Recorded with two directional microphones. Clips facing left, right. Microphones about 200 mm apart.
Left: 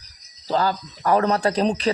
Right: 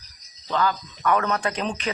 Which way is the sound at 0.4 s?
35° left (ahead or behind).